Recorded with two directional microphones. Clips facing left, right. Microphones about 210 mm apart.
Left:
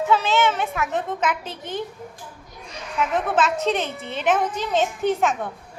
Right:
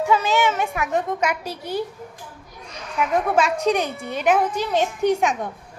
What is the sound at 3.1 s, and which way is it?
A child's voice, 10° right (ahead or behind).